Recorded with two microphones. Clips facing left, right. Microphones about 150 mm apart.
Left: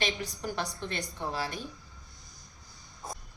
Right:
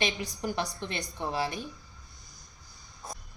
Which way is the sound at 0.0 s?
15° right (ahead or behind).